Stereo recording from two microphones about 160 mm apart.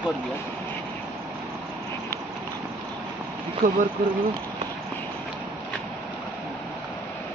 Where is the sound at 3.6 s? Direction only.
55° right (ahead or behind).